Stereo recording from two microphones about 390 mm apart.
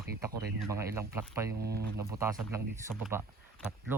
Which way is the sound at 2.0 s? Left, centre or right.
Centre.